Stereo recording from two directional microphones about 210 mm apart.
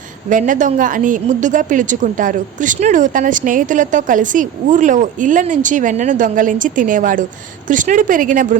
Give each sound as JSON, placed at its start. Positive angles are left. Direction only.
{"t": 0.3, "sound": "a woman's voice", "side_deg": -40}